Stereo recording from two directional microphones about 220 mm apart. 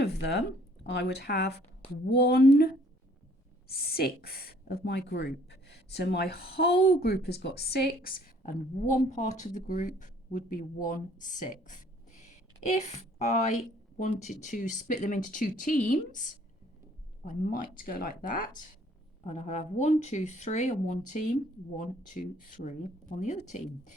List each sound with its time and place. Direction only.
0.0 s a sound: 50° left (ahead or behind)
0.9 s speech: 50° left (ahead or behind)
3.7 s speech: 45° left (ahead or behind)
8.9 s speech: 35° left (ahead or behind)